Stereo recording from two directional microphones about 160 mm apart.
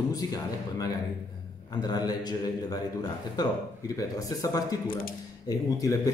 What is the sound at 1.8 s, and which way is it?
Speech, 25° left (ahead or behind).